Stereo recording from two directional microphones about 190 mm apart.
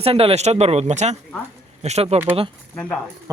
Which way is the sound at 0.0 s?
30° right (ahead or behind).